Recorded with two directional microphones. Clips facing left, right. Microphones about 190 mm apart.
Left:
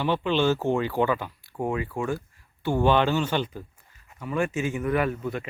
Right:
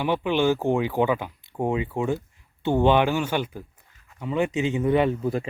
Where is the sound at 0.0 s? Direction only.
15° right (ahead or behind).